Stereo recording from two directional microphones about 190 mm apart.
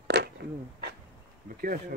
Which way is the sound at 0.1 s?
60° right (ahead or behind).